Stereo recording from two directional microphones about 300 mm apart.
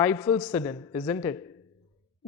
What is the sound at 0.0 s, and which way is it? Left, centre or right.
Speech, centre.